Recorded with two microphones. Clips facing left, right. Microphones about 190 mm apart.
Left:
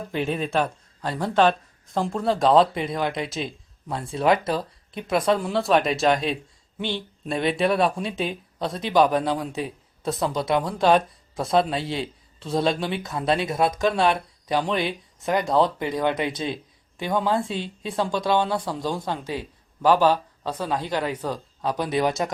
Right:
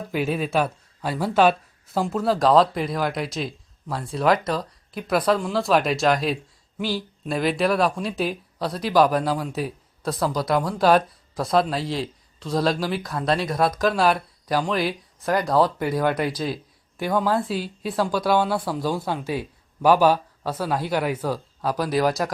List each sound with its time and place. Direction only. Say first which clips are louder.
0.1 s speech: right 2 dB; 5° right (ahead or behind)
10.0 s speech: even; 20° left (ahead or behind)
10.5 s speech: right 1 dB; centre (ahead or behind)